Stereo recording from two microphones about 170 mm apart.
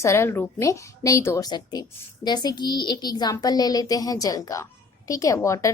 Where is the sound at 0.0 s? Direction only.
15° left (ahead or behind).